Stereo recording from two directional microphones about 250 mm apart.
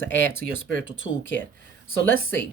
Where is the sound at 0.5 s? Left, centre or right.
Left.